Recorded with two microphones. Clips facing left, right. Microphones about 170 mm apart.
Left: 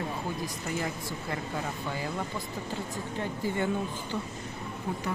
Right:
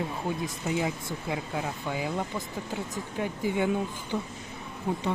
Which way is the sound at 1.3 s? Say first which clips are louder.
Right 3 dB; 10° right (ahead or behind).